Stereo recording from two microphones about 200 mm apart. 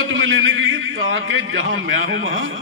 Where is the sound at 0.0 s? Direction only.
80° right.